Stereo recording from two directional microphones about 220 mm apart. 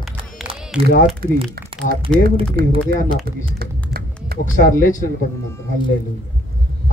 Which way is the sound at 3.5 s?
45° right (ahead or behind).